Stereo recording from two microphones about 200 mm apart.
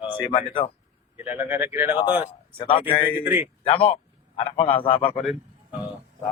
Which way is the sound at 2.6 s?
25° left (ahead or behind).